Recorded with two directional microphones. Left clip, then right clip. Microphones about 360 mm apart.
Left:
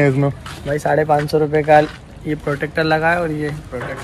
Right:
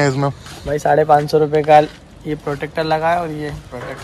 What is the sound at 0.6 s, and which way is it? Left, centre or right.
A man's voice, right.